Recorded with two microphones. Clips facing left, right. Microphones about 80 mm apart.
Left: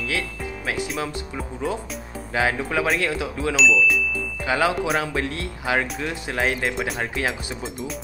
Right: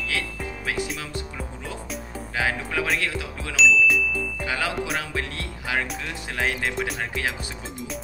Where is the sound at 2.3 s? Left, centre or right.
Left.